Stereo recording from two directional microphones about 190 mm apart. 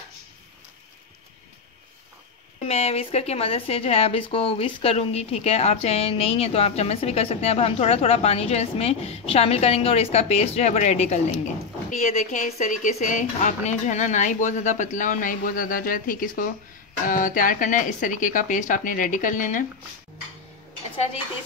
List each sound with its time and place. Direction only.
2.6 s speech: 35° left (ahead or behind)